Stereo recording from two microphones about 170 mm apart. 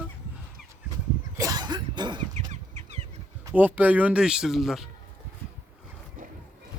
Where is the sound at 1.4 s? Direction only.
20° right (ahead or behind).